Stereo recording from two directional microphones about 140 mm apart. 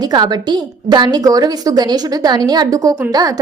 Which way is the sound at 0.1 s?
30° right (ahead or behind).